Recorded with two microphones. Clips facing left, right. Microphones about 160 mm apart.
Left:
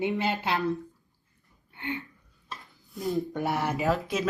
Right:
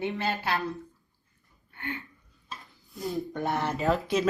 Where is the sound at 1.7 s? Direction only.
15° left (ahead or behind).